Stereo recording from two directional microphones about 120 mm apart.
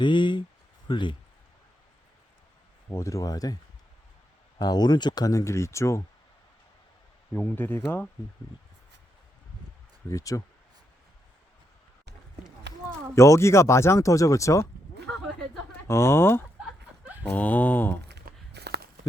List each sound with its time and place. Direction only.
0.0 s speech: 40° left (ahead or behind)
2.9 s speech: 25° left (ahead or behind)
7.3 s speech: 15° left (ahead or behind)
10.1 s speech: 25° left (ahead or behind)
13.1 s speech: 25° left (ahead or behind)
15.9 s speech: 20° left (ahead or behind)